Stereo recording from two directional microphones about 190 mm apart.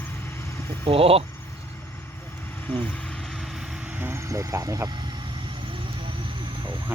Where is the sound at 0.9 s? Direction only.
30° right (ahead or behind).